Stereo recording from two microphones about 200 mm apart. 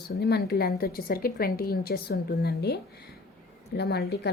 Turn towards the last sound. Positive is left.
turn(degrees=55)  # may be behind; listen again after turning